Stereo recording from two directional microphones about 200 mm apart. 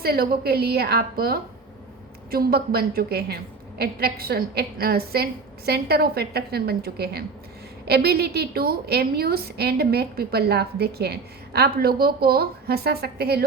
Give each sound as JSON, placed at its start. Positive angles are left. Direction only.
{"t": 0.0, "sound": "a woman's voice", "side_deg": -50}